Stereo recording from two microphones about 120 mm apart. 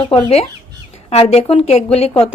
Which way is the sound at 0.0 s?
55° left (ahead or behind).